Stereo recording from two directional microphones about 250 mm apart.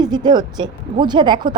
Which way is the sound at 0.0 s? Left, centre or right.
Centre.